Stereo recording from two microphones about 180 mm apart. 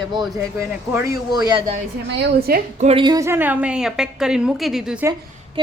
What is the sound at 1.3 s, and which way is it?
Speech, 25° right (ahead or behind).